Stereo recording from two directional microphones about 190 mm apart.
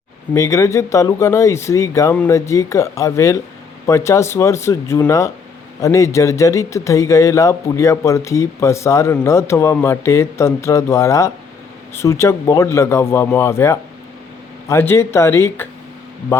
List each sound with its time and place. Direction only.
0.3 s speech: 15° left (ahead or behind)